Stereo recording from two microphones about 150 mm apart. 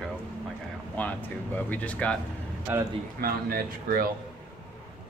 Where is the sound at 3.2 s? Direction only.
80° right.